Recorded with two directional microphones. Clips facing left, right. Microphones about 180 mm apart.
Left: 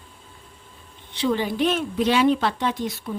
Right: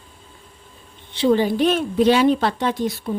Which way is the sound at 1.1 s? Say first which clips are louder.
Right 6 dB; 30° right (ahead or behind).